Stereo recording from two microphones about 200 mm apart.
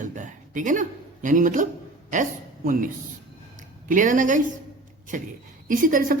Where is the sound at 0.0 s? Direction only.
40° right (ahead or behind).